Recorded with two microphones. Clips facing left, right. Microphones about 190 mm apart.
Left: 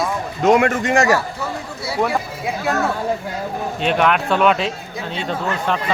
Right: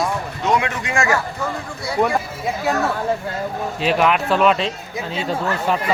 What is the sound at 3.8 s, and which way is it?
Speech, centre (ahead or behind).